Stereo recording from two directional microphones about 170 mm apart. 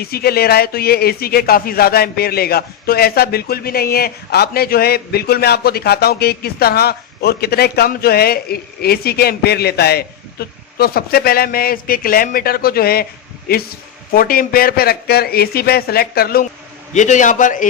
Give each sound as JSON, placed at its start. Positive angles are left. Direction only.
{"t": 0.0, "sound": "speech", "side_deg": 65}
{"t": 16.9, "sound": "a man's voice", "side_deg": 45}